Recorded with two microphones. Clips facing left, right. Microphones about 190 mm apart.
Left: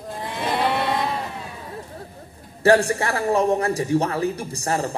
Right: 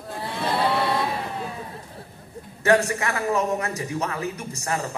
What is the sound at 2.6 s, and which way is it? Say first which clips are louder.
A man's voice: left 3 dB; 30° left (ahead or behind).